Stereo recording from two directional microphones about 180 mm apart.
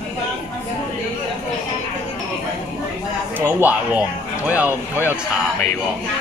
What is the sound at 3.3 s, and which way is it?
A woman's voice, 10° right (ahead or behind).